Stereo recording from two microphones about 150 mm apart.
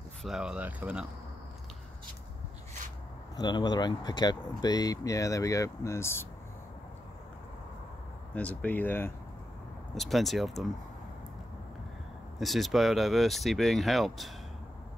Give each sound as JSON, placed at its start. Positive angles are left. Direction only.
{"t": 0.2, "sound": "speech", "side_deg": -5}
{"t": 3.3, "sound": "speech", "side_deg": 30}
{"t": 8.4, "sound": "speech", "side_deg": 10}
{"t": 9.9, "sound": "speech", "side_deg": 0}
{"t": 12.4, "sound": "speech", "side_deg": 0}